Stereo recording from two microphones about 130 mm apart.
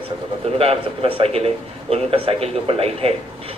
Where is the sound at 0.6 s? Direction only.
45° right (ahead or behind).